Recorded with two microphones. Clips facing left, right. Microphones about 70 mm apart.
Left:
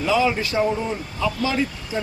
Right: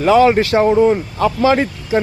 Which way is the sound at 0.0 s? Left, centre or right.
Right.